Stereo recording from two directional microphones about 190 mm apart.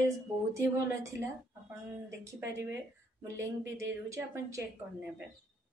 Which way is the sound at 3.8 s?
15° right (ahead or behind).